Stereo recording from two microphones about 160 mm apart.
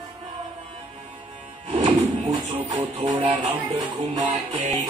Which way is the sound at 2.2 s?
20° right (ahead or behind).